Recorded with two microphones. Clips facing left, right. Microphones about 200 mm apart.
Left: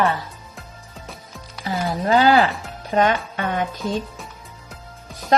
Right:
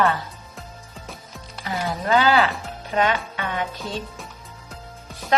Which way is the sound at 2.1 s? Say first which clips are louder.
Left 3 dB; 40° left (ahead or behind).